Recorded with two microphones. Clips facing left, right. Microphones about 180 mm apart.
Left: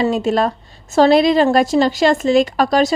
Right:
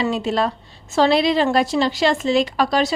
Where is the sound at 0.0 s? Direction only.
45° left (ahead or behind).